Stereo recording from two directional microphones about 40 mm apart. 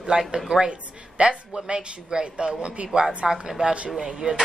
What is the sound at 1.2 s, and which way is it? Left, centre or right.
Speech, right.